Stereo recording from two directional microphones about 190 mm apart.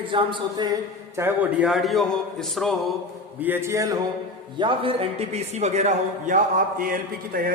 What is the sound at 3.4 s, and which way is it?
Speech, 10° right (ahead or behind).